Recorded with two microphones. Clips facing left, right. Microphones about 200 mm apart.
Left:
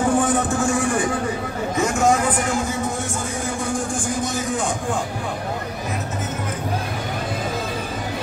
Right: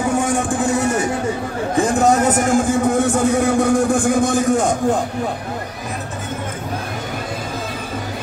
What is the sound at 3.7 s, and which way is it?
A man's voice, 55° right (ahead or behind).